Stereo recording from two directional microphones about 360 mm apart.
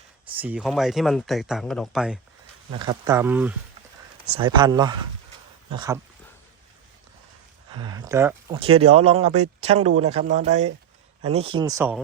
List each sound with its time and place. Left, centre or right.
0.3 s speech: centre
7.7 s speech: centre